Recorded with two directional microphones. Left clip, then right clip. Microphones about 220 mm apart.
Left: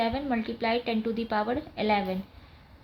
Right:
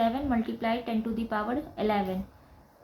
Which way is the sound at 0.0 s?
30° left (ahead or behind).